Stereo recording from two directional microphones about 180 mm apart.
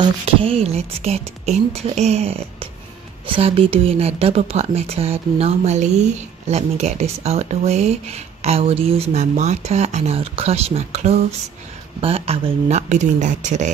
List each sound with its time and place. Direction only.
0.0 s speech: 30° right (ahead or behind)